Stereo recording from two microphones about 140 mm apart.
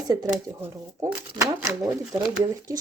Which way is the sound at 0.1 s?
25° right (ahead or behind).